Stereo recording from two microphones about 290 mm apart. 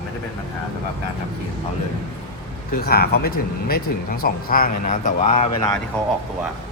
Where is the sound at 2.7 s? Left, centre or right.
Left.